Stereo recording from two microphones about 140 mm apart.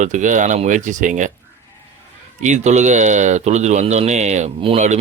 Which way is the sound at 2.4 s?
60° right (ahead or behind).